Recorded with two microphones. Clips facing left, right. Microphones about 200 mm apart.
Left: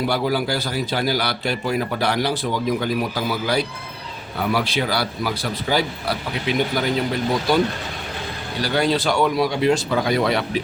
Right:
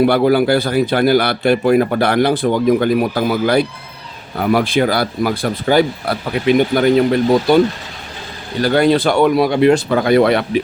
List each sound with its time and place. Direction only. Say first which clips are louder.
0.0 s a man's voice: right 9 dB; 60° right (ahead or behind)
8.6 s a man's voice: right 7 dB; 55° right (ahead or behind)